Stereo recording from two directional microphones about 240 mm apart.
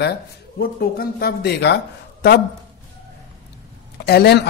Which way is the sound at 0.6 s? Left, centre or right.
Left.